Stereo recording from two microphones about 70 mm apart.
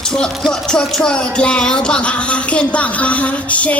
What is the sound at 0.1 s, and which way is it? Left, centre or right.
Music, centre.